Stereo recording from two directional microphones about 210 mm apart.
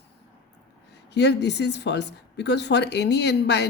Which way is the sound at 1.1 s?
55° left (ahead or behind).